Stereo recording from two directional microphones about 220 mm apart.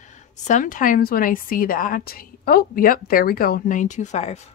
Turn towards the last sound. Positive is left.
turn(degrees=30)  # may be behind; listen again after turning